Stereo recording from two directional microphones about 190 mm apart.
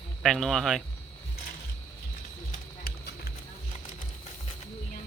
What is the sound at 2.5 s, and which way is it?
Music, 55° left (ahead or behind).